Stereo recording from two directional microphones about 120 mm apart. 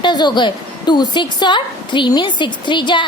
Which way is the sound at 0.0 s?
35° left (ahead or behind).